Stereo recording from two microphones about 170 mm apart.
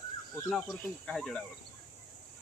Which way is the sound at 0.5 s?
5° left (ahead or behind).